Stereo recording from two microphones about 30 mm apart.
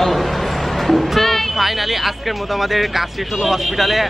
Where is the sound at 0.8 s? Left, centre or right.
Centre.